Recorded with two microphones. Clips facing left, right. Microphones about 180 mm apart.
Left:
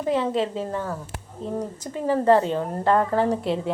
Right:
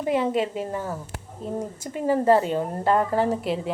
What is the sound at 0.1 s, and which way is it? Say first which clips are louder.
A woman's voice: even; 10° right (ahead or behind).